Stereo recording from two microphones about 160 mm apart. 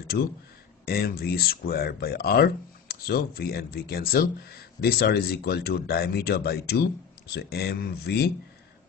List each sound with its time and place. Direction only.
0.0 s speech: 70° left (ahead or behind); by 8.3 s 90° left